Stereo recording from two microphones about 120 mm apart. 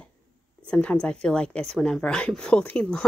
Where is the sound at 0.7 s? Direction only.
10° left (ahead or behind).